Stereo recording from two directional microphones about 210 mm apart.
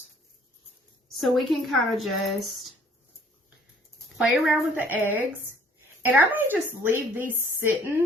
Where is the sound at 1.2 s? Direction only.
Centre (ahead or behind).